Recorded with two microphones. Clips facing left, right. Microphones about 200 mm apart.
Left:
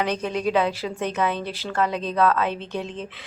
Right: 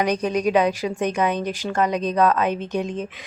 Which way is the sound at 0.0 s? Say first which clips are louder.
Right 3 dB; 15° right (ahead or behind).